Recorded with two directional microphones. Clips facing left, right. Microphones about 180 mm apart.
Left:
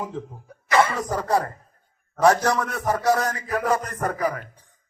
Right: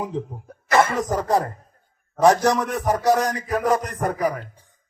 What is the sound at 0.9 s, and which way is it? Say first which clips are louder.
Speech: right 2 dB; 20° right (ahead or behind).